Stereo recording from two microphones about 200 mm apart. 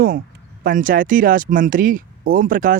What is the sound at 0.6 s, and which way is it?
Speech, 40° right (ahead or behind).